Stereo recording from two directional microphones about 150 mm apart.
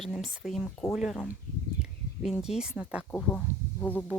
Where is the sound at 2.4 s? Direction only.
5° right (ahead or behind).